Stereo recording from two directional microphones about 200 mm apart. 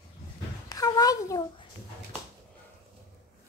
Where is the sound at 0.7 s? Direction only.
20° left (ahead or behind).